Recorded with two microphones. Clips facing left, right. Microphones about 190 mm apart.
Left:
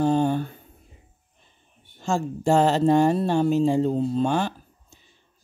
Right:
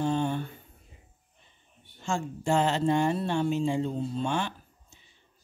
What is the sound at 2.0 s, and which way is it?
Speech, 40° left (ahead or behind).